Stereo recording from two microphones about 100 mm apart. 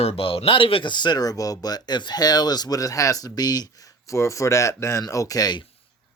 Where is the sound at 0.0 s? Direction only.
75° left (ahead or behind); by 5.6 s 40° left (ahead or behind).